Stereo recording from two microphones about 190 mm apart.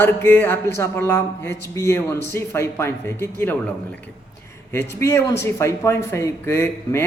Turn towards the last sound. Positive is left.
turn(degrees=15)  # may be behind; listen again after turning